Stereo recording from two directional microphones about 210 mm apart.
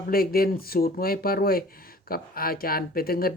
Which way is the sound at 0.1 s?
45° left (ahead or behind).